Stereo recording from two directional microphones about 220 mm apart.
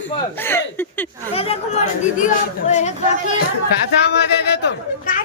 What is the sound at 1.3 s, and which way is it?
Speech, 25° left (ahead or behind).